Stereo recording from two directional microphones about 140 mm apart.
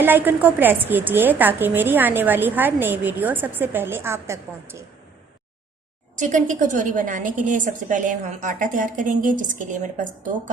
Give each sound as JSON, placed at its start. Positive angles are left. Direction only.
{"t": 0.0, "sound": "a woman's voice", "side_deg": -15}
{"t": 6.1, "sound": "a woman's voice", "side_deg": -60}